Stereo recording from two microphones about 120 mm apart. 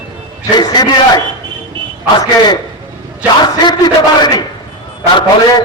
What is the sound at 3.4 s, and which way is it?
A man's voice, 35° left (ahead or behind).